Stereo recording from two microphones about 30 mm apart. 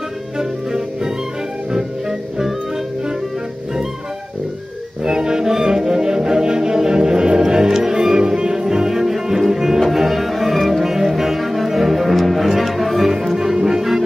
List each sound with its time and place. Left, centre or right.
0.4 s music: right
5.0 s music: right; by 13.1 s centre
13.1 s music: centre